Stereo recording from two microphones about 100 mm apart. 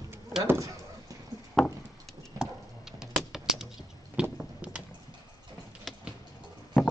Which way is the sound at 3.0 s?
5° right (ahead or behind).